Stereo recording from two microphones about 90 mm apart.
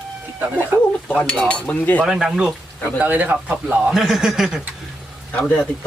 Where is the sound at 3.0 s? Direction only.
20° right (ahead or behind).